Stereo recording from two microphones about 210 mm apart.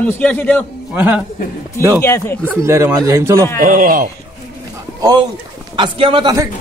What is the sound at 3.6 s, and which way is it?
Speech, 40° right (ahead or behind).